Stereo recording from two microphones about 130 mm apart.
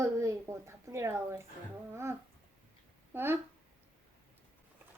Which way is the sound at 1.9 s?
20° right (ahead or behind).